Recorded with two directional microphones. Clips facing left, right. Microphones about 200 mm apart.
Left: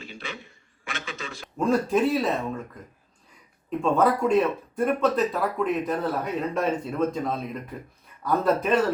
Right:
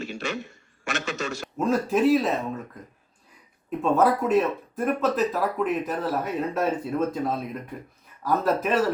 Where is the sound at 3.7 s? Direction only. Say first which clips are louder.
Right 1 dB; 5° right (ahead or behind).